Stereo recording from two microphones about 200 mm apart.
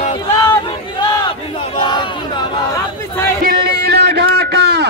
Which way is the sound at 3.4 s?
50° right (ahead or behind).